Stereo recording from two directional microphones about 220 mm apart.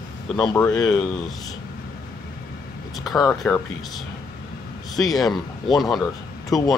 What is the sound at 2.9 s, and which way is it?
Speech, centre (ahead or behind).